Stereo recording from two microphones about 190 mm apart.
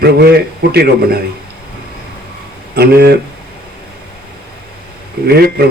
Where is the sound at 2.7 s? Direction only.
55° right (ahead or behind).